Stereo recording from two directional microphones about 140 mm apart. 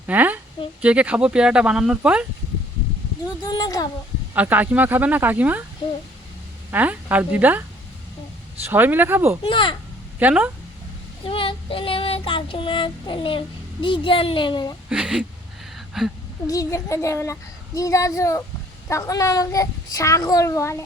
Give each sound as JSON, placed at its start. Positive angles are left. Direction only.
{"t": 0.0, "sound": "a sound", "side_deg": -10}
{"t": 0.8, "sound": "speech", "side_deg": -10}
{"t": 3.4, "sound": "a child's voice", "side_deg": 30}
{"t": 4.4, "sound": "speech", "side_deg": -10}
{"t": 6.7, "sound": "speech", "side_deg": -10}
{"t": 8.6, "sound": "speech", "side_deg": -15}
{"t": 9.4, "sound": "a woman's voice", "side_deg": 35}
{"t": 10.2, "sound": "speech", "side_deg": -10}
{"t": 11.3, "sound": "child singing", "side_deg": 40}
{"t": 13.8, "sound": "a woman's voice", "side_deg": 35}
{"t": 14.8, "sound": "a woman's voice", "side_deg": -5}
{"t": 16.5, "sound": "a child's voice", "side_deg": 25}